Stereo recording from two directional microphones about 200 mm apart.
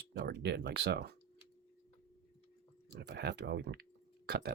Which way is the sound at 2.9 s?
55° right (ahead or behind).